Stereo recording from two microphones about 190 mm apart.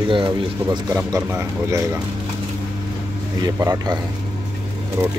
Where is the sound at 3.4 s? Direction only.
15° right (ahead or behind).